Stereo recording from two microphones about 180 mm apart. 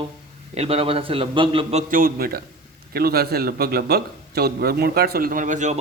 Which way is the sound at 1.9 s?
50° right (ahead or behind).